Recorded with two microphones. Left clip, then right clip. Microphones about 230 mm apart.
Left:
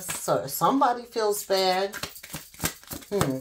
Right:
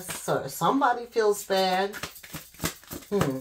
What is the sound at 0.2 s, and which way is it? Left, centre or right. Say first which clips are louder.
Speech: left 2 dB; left.